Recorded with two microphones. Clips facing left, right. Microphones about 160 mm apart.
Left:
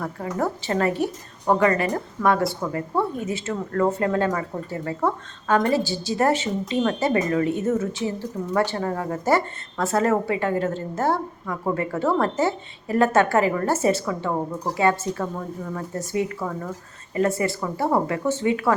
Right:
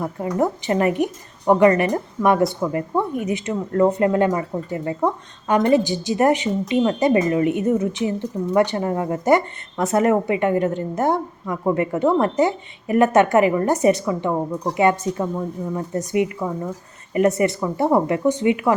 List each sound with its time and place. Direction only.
0.0 s a woman's voice: 20° right (ahead or behind)